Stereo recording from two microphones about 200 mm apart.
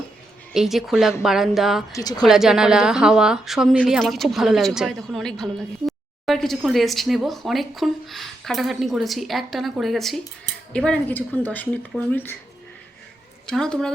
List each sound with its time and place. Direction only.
0.5 s a woman's voice: centre (ahead or behind)
1.9 s a woman's voice: 20° left (ahead or behind)
2.2 s a woman's voice: centre (ahead or behind)
13.5 s a woman's voice: 5° left (ahead or behind)